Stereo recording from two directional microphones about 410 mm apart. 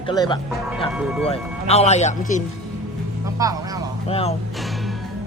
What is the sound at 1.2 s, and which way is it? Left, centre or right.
Speech, centre.